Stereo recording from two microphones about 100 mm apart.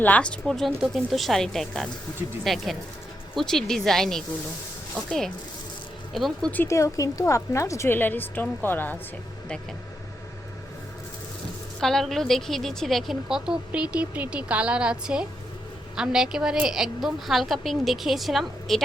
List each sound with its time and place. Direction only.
0.0 s a woman's voice: 15° left (ahead or behind)
6.1 s a woman's voice: centre (ahead or behind)
6.7 s a woman's voice: 30° left (ahead or behind)
11.8 s a woman's voice: 5° left (ahead or behind)